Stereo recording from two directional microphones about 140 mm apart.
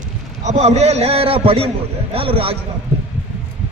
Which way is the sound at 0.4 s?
50° right (ahead or behind).